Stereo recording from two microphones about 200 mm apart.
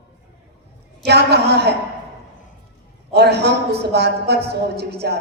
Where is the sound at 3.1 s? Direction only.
55° right (ahead or behind).